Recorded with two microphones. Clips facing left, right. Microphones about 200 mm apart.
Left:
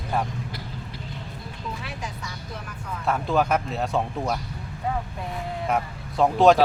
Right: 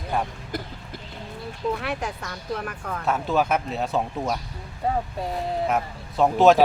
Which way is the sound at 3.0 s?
Centre (ahead or behind).